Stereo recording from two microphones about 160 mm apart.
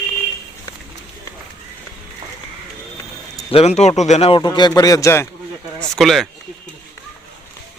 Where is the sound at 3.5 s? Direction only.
40° left (ahead or behind); by 5.3 s 15° left (ahead or behind).